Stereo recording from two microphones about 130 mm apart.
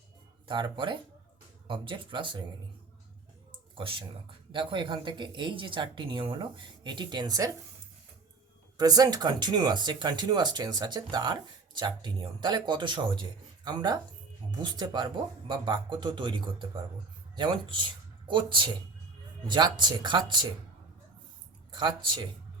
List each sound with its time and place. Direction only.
0.4 s speech: 35° right (ahead or behind)
3.8 s speech: 40° right (ahead or behind)
8.8 s speech: 30° right (ahead or behind)
21.7 s speech: 35° right (ahead or behind)